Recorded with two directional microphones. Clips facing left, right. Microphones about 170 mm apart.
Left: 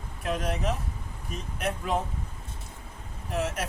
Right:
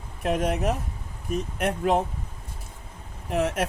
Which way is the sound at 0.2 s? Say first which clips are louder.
Right 5 dB; 55° right (ahead or behind).